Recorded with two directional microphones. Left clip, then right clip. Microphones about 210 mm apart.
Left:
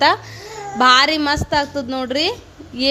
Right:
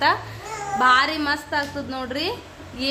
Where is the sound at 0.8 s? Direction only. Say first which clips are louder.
Left 5 dB; 40° left (ahead or behind).